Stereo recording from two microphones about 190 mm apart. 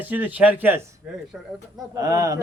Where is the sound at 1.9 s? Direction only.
15° right (ahead or behind).